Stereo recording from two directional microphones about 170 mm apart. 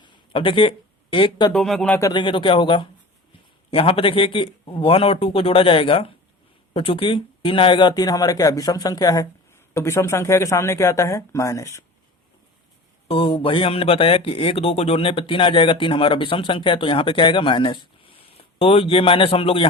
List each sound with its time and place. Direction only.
0.0 s a sound: 30° left (ahead or behind)
1.5 s speech: centre (ahead or behind)
2.0 s speech: 20° left (ahead or behind)
2.2 s speech: 30° left (ahead or behind)
13.1 s speech: 30° left (ahead or behind)